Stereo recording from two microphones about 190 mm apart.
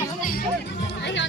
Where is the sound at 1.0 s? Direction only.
70° left (ahead or behind).